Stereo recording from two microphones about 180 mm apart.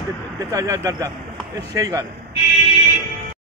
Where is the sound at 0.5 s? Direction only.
20° right (ahead or behind).